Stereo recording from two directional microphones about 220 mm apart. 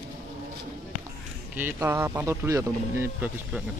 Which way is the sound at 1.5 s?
10° right (ahead or behind).